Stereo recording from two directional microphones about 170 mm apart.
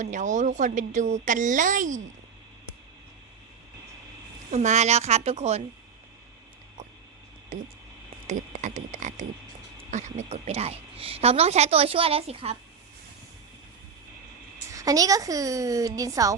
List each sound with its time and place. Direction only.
0.0 s a woman's voice: 45° right (ahead or behind)
4.5 s a woman's voice: 45° right (ahead or behind)
7.5 s a woman's voice: 45° right (ahead or behind)
14.7 s a woman's voice: 20° right (ahead or behind)